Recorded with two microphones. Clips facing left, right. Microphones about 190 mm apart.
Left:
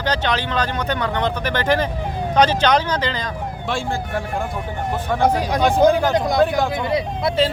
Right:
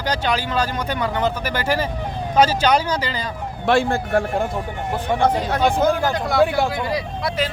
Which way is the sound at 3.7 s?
60° right (ahead or behind).